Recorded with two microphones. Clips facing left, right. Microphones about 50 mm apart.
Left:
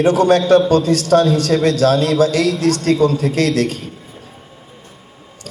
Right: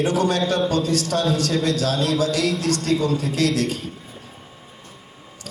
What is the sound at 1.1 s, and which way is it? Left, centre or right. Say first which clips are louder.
Speech: left 12 dB; left.